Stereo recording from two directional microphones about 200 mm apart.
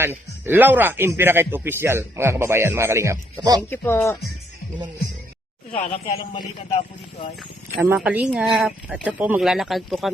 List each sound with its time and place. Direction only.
0.0 s speech: 10° right (ahead or behind)
3.7 s speech: 10° left (ahead or behind)
5.7 s speech: 35° left (ahead or behind)
7.8 s speech: 5° right (ahead or behind)